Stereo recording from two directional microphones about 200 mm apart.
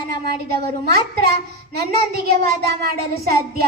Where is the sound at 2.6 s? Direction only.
50° right (ahead or behind).